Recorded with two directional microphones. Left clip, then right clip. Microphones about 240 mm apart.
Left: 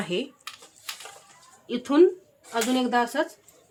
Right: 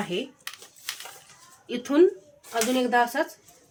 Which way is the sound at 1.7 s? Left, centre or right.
Centre.